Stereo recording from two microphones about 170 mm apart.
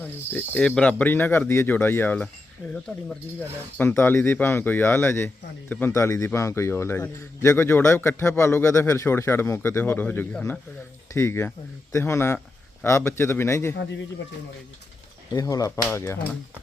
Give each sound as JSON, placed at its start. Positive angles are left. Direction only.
{"t": 0.0, "sound": "a man's voice", "side_deg": 10}
{"t": 2.6, "sound": "speech", "side_deg": -5}
{"t": 3.8, "sound": "a man's voice", "side_deg": 10}
{"t": 15.3, "sound": "a man's voice", "side_deg": 20}